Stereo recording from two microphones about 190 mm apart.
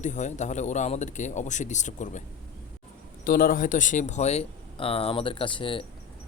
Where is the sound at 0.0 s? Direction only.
40° left (ahead or behind).